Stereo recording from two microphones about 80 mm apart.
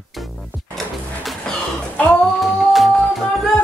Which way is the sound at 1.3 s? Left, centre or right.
Centre.